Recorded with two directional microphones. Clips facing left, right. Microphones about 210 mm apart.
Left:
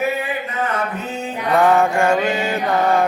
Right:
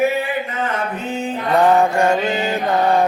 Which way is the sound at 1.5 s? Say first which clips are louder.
Right 1 dB; 20° right (ahead or behind).